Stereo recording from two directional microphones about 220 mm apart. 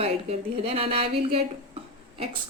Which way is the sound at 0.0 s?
25° right (ahead or behind).